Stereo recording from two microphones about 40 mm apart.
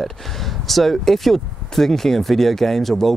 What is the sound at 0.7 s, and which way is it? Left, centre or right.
Speech, centre.